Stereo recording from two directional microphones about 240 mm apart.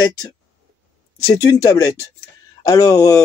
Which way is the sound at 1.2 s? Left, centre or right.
Centre.